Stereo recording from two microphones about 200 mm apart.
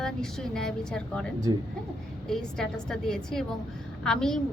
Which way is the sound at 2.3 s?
5° left (ahead or behind).